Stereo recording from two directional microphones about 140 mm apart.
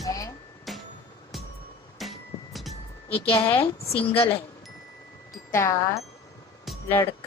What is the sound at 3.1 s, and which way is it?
Speech, 40° left (ahead or behind).